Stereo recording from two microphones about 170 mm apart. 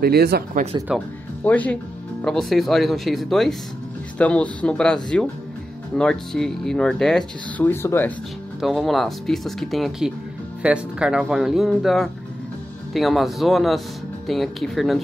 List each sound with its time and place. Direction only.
0.0 s speech: 65° right (ahead or behind)
0.9 s speech: 10° left (ahead or behind)
8.5 s speech: centre (ahead or behind)